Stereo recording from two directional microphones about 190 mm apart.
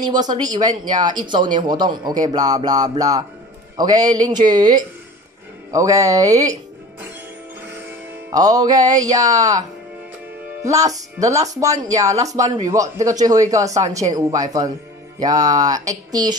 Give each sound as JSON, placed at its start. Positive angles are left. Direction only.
{"t": 0.0, "sound": "speech", "side_deg": -20}
{"t": 8.3, "sound": "speech", "side_deg": -20}